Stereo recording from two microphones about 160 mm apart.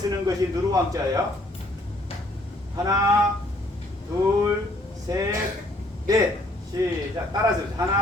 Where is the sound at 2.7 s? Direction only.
20° right (ahead or behind).